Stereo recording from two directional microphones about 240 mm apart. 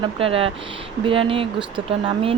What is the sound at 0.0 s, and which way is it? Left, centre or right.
Speech, right.